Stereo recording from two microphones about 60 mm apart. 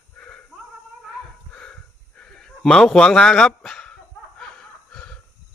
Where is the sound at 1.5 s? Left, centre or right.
Centre.